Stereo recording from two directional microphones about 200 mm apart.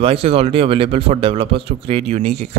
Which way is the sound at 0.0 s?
30° right (ahead or behind).